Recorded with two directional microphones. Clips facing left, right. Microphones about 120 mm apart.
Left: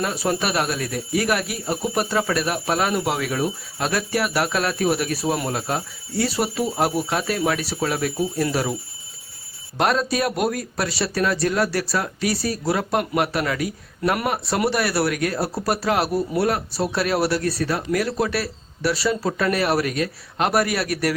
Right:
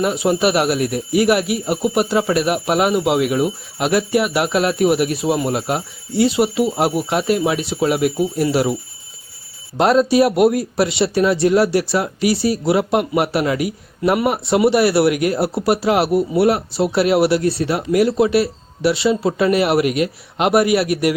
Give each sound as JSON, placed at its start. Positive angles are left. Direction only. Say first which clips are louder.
{"t": 0.0, "sound": "speech", "louder": "right 7 dB", "side_deg": -20}
{"t": 1.6, "sound": "speech", "louder": "right 6 dB", "side_deg": -5}
{"t": 2.1, "sound": "speech", "louder": "right 5 dB", "side_deg": -25}
{"t": 9.7, "sound": "speech", "louder": "right 7 dB", "side_deg": -25}